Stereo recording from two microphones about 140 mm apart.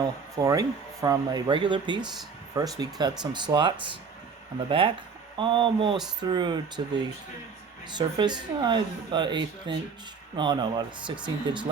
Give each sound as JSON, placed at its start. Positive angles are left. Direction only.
{"t": 0.0, "sound": "speech", "side_deg": -25}
{"t": 5.4, "sound": "speech", "side_deg": -35}
{"t": 7.9, "sound": "speech", "side_deg": -30}